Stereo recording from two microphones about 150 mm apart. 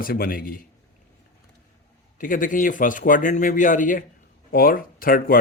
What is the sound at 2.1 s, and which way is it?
A man's voice, 65° left (ahead or behind).